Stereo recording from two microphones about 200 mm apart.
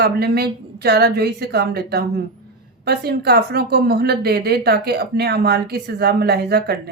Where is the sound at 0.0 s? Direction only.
55° right (ahead or behind).